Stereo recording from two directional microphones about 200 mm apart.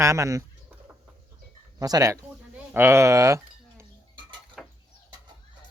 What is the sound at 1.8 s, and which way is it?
Speech, 20° right (ahead or behind).